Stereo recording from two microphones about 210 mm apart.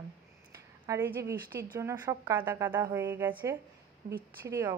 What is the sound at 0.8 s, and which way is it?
A woman's voice, 10° right (ahead or behind).